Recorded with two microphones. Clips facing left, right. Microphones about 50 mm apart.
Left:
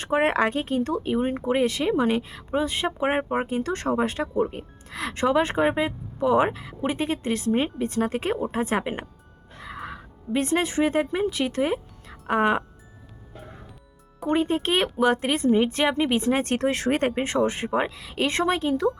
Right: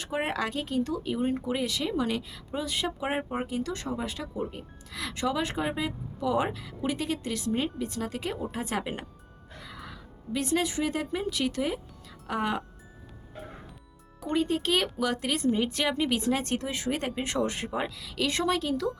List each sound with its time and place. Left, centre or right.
0.0 s speech: left
14.3 s speech: left
17.1 s speech: left